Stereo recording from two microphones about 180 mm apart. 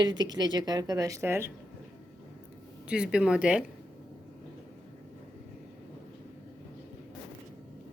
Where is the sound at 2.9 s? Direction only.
5° right (ahead or behind).